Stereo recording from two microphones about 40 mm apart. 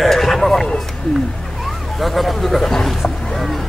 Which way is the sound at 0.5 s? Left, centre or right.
Centre.